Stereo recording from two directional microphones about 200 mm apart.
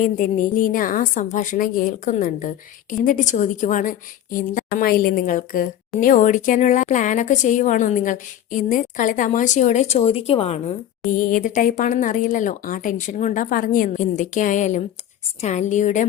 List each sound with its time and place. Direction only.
0.0 s a woman's voice: 40° left (ahead or behind)
11.1 s a woman's voice: 40° left (ahead or behind)